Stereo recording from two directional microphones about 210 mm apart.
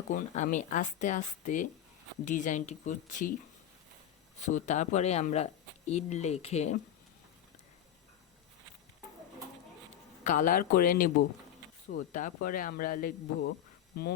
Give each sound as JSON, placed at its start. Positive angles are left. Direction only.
{"t": 0.1, "sound": "speech", "side_deg": 40}
{"t": 4.4, "sound": "speech", "side_deg": 35}
{"t": 10.2, "sound": "speech", "side_deg": 40}